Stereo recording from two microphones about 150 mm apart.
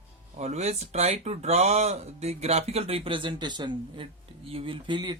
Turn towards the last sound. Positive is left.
turn(degrees=-30)  # may be behind; listen again after turning